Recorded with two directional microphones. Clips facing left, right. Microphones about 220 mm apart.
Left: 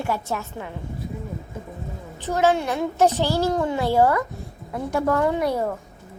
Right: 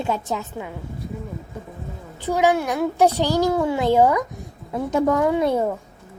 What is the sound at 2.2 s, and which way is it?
A child's voice, 15° right (ahead or behind).